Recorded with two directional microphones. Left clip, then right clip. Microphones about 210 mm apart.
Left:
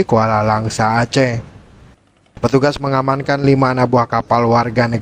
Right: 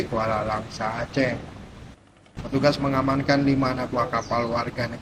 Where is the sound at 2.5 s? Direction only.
50° left (ahead or behind).